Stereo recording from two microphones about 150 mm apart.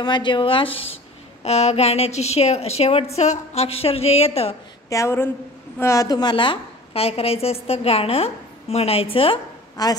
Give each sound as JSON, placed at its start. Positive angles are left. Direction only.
{"t": 0.0, "sound": "a woman's voice", "side_deg": 30}
{"t": 4.8, "sound": "a woman's voice", "side_deg": 20}
{"t": 9.8, "sound": "a woman's voice", "side_deg": 25}